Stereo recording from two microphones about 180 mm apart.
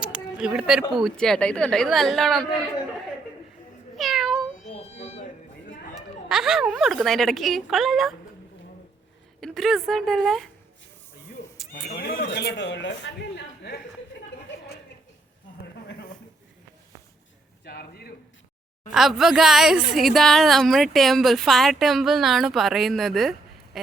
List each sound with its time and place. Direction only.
0.0 s a woman's voice: 5° right (ahead or behind)
3.9 s cat: centre (ahead or behind)
4.6 s a sound: 35° left (ahead or behind)
5.9 s a woman's voice: centre (ahead or behind)
9.4 s a woman's voice: centre (ahead or behind)
11.9 s a man's voice: 60° left (ahead or behind)
17.7 s a sound: 60° left (ahead or behind)
18.9 s a woman's voice: centre (ahead or behind)
23.7 s a sound: centre (ahead or behind)